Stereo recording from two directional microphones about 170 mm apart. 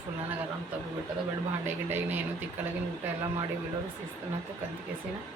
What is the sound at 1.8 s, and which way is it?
Speech, 10° right (ahead or behind).